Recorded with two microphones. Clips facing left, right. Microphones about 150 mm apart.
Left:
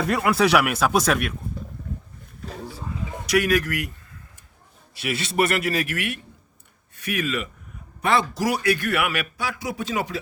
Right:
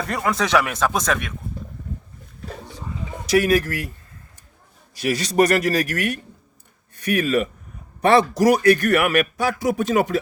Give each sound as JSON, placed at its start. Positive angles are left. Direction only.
{"t": 0.0, "sound": "speech", "side_deg": 5}
{"t": 3.2, "sound": "a man's voice", "side_deg": -30}
{"t": 4.9, "sound": "a man's voice", "side_deg": -40}